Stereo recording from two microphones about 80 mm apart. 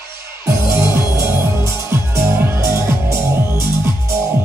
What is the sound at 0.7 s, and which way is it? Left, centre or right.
Music, right.